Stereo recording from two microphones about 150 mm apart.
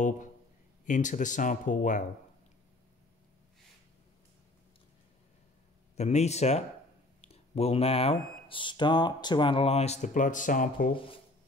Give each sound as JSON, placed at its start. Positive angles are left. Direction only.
{"t": 0.8, "sound": "speech", "side_deg": 55}
{"t": 5.9, "sound": "speech", "side_deg": 45}